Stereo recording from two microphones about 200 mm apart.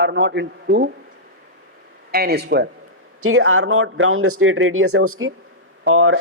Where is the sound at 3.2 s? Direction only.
90° right.